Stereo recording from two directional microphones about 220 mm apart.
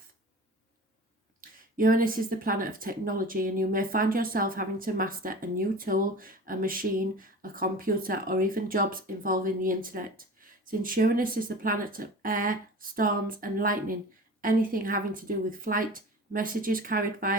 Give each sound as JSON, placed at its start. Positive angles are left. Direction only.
{"t": 1.4, "sound": "a woman's voice", "side_deg": -40}